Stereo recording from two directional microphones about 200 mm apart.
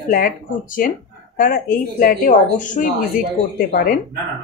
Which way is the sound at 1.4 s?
45° left (ahead or behind).